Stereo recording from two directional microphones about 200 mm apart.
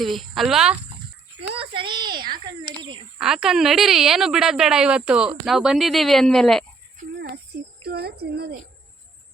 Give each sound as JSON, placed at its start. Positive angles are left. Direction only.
{"t": 0.0, "sound": "a woman's voice", "side_deg": 0}
{"t": 1.4, "sound": "a child's voice", "side_deg": -25}
{"t": 3.2, "sound": "a woman's voice", "side_deg": -5}
{"t": 7.5, "sound": "a sound", "side_deg": -55}
{"t": 7.9, "sound": "speech", "side_deg": -55}